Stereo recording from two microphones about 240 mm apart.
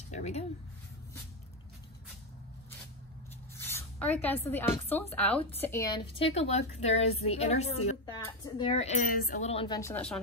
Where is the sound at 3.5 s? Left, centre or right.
Centre.